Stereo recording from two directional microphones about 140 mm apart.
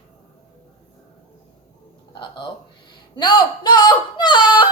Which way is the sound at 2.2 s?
35° left (ahead or behind).